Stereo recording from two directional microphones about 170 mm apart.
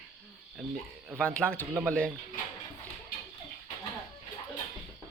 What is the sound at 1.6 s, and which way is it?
Speech, 15° right (ahead or behind).